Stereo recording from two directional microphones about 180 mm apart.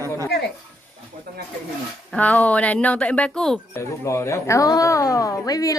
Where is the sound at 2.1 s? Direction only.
10° left (ahead or behind).